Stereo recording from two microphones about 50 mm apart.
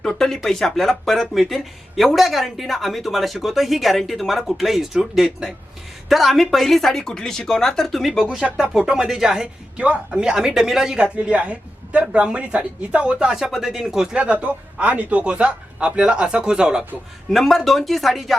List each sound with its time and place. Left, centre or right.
0.0 s speech: centre
8.3 s speech: right
9.7 s a man's voice: right
10.2 s speech: centre
11.0 s a man's voice: right
14.2 s a man's voice: right
17.3 s speech: centre